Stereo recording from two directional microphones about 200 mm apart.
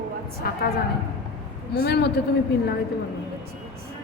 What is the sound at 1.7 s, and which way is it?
Speech, 55° left (ahead or behind).